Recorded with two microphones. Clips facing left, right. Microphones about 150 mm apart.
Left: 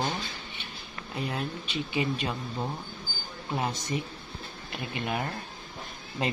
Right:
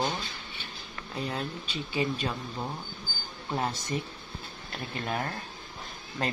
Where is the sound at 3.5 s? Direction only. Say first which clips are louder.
Even; 10° left (ahead or behind).